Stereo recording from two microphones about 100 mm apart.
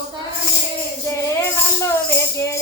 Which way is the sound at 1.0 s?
30° left (ahead or behind).